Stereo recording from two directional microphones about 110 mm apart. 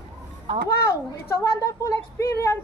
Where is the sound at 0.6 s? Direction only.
25° left (ahead or behind).